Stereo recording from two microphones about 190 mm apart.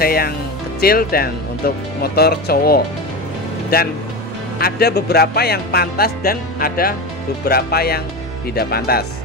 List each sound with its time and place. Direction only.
0.0 s speech: 50° left (ahead or behind)
4.6 s speech: 55° left (ahead or behind)